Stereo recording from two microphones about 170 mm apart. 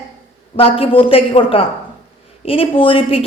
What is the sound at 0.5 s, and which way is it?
A woman's voice, 35° left (ahead or behind).